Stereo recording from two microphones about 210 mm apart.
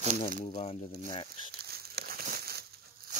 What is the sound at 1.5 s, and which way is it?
Crumpling, 50° right (ahead or behind).